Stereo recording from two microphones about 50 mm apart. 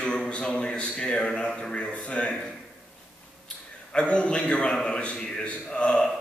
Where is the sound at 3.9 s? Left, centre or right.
Left.